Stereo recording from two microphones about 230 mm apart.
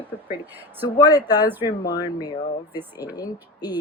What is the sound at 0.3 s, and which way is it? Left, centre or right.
Speech, centre.